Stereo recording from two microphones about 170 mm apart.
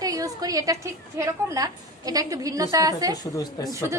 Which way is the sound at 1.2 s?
20° right (ahead or behind).